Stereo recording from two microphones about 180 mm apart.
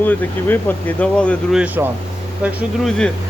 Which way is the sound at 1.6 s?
10° right (ahead or behind).